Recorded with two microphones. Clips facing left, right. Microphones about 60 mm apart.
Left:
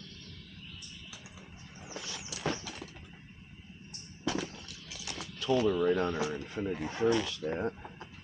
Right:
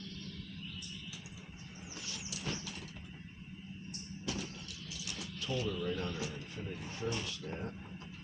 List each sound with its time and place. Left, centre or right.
2.0 s vehicle: left
4.3 s a sound: left
4.9 s a sound: left
5.4 s music: left
5.6 s speech: left
6.5 s speech: left